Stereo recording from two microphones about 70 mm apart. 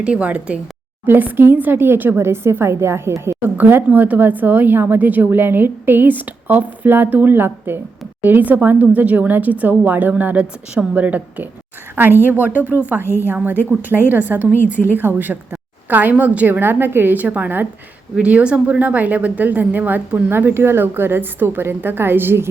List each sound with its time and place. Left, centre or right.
0.0 s speech: centre
1.0 s speech: right
3.6 s a woman's voice: right